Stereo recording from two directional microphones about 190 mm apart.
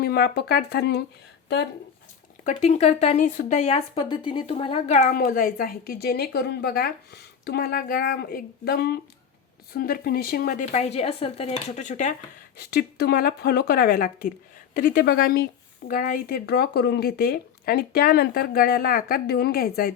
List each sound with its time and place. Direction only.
0.0 s speech: 55° left (ahead or behind)
2.4 s speech: 40° left (ahead or behind)
12.5 s speech: 60° left (ahead or behind)